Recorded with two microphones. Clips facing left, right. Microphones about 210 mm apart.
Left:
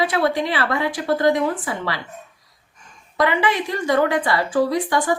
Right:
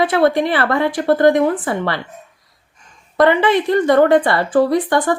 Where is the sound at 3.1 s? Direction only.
55° right (ahead or behind).